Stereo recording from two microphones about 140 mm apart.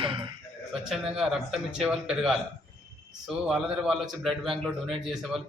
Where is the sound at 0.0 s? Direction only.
35° right (ahead or behind).